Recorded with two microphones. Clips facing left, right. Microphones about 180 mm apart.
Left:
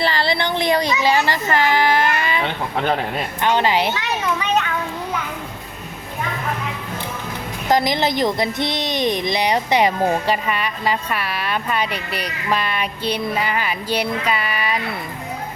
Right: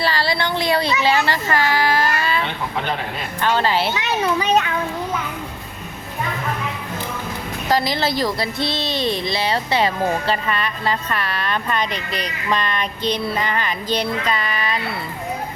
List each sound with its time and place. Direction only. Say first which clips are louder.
0.0 s speech: left 1 dB; 20° left (ahead or behind)
3.4 s a woman's voice: left 1 dB; 15° left (ahead or behind)
4.2 s a child's voice: right 4 dB; 35° right (ahead or behind)
7.7 s a woman's voice: left 2 dB; 20° left (ahead or behind)